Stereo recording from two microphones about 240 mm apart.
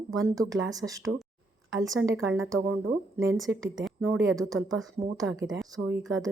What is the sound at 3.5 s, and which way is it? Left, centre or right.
Speech, right.